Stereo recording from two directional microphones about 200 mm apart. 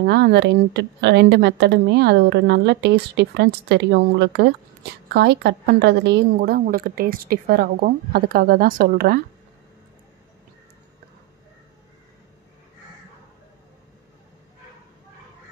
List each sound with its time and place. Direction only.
0.0 s a woman's voice: 55° right (ahead or behind)